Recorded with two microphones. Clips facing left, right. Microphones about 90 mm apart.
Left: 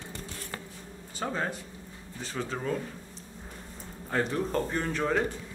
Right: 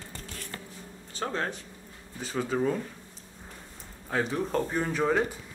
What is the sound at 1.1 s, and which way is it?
Speech, 5° left (ahead or behind).